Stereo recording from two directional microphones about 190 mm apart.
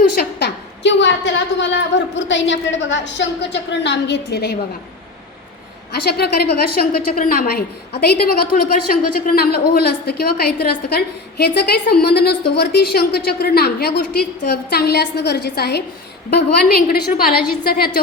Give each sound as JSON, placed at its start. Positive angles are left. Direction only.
{"t": 0.2, "sound": "a woman's voice", "side_deg": 60}
{"t": 5.9, "sound": "a woman's voice", "side_deg": 60}